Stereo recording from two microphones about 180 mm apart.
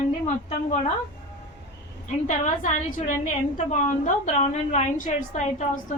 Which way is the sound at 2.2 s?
40° left (ahead or behind).